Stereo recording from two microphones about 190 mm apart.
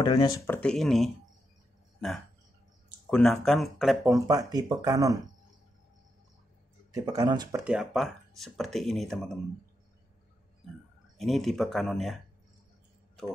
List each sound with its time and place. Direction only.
0.0 s speech: 20° left (ahead or behind)
0.6 s speech: 5° left (ahead or behind)
3.1 s speech: 5° left (ahead or behind)
4.0 s speech: 15° right (ahead or behind)
6.9 s speech: 20° right (ahead or behind)
7.6 s speech: 5° right (ahead or behind)
11.1 s speech: centre (ahead or behind)